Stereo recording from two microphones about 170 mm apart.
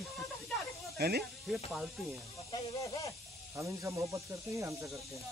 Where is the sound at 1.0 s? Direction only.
70° right (ahead or behind).